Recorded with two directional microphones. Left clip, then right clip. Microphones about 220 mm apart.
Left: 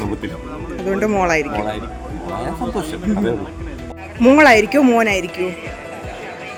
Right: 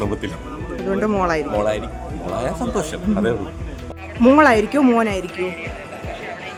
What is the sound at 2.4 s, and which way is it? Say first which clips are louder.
A man's voice: even; 10° right (ahead or behind).